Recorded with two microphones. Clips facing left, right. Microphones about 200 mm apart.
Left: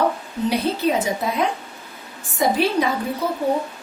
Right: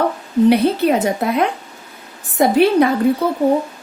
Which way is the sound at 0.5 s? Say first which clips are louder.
Right 6 dB; 60° right (ahead or behind).